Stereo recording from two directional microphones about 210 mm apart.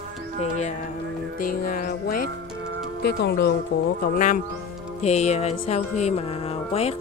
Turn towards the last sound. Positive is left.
turn(degrees=30)  # may be behind; listen again after turning